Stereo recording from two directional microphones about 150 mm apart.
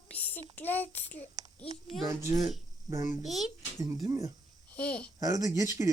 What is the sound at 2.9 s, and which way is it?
Speech, 20° right (ahead or behind).